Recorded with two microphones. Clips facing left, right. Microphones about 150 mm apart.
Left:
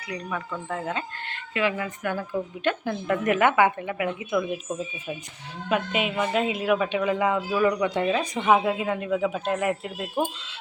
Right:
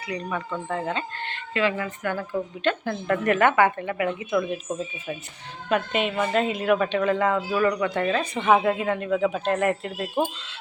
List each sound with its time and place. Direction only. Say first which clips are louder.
0.3 s speech: right 1 dB; centre (ahead or behind)
5.6 s speech: right 1 dB; 5° left (ahead or behind)